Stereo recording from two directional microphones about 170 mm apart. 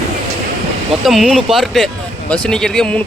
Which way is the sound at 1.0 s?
Centre (ahead or behind).